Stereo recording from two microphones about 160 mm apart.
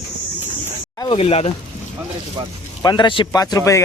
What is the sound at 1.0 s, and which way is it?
Speech, 35° left (ahead or behind).